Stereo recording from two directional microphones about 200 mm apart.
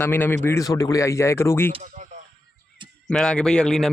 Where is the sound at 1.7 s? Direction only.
40° right (ahead or behind).